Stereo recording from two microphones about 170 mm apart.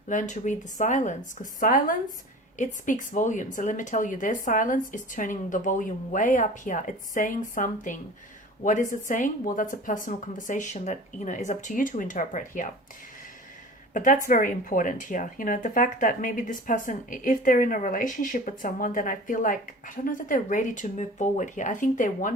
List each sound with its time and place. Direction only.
0.1 s speech: 45° left (ahead or behind)
13.9 s speech: 50° left (ahead or behind)